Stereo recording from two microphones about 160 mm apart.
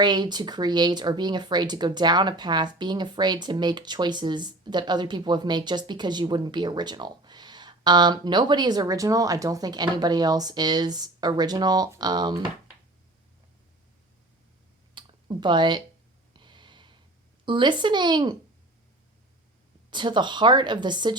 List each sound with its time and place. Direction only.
0.0 s speech: 25° right (ahead or behind)
14.9 s a sound: 30° right (ahead or behind)
17.4 s speech: 30° right (ahead or behind)
19.9 s speech: 30° right (ahead or behind)